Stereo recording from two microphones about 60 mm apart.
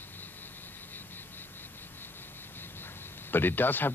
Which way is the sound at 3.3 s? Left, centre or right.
Left.